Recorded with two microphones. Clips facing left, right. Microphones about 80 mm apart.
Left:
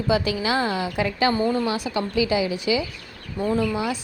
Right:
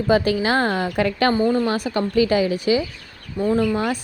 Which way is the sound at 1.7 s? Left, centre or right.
Right.